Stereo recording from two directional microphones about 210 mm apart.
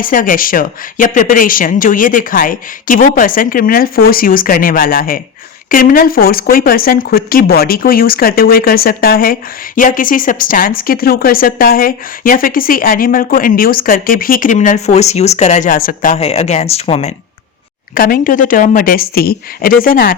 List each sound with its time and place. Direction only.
0.0 s speech: 40° left (ahead or behind)
17.9 s speech: 40° left (ahead or behind)